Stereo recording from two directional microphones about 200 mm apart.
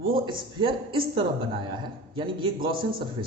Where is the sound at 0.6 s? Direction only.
25° right (ahead or behind).